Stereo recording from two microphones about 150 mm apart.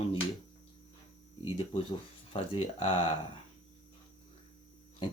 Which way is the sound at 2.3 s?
35° left (ahead or behind).